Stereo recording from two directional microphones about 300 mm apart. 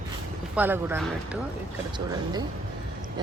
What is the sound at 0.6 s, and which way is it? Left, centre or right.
Speech, centre.